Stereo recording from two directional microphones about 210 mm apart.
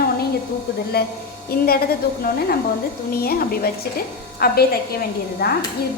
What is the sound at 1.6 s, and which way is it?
A woman's voice, 45° left (ahead or behind).